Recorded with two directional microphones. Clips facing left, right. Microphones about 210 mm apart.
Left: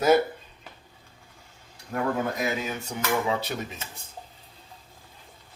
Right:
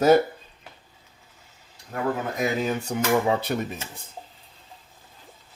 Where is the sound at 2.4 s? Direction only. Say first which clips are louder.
Right 4 dB; 45° right (ahead or behind).